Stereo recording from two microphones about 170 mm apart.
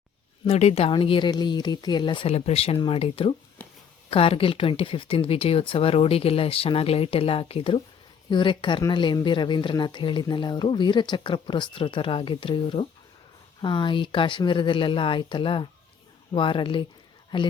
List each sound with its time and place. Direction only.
0.4 s speech: 35° left (ahead or behind)